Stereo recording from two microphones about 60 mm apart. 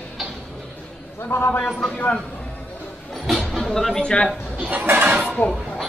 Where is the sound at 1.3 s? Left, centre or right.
Left.